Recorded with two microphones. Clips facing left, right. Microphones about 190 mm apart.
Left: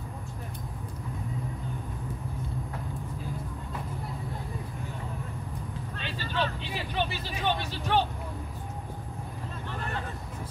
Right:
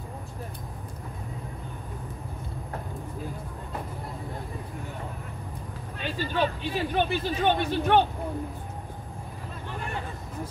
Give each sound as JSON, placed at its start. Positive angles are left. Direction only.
{"t": 5.9, "sound": "vehicle", "side_deg": -45}
{"t": 6.6, "sound": "speech", "side_deg": -50}